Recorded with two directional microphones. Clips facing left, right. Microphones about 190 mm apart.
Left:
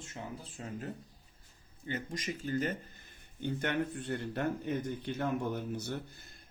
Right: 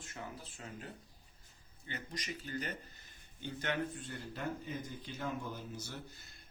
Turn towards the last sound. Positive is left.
turn(degrees=55)  # may be behind; listen again after turning